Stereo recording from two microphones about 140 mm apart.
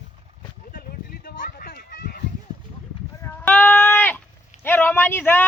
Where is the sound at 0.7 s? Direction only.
90° left.